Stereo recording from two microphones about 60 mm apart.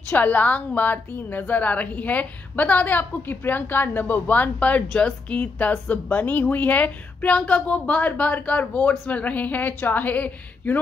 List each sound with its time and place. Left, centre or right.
0.1 s a woman's voice: left